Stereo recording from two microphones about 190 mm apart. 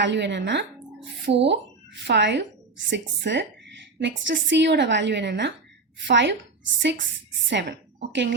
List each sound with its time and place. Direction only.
0.0 s a woman's voice: 70° right (ahead or behind)
7.4 s a woman's voice: 70° right (ahead or behind)